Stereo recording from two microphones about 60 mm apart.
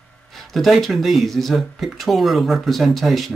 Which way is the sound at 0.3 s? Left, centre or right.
Centre.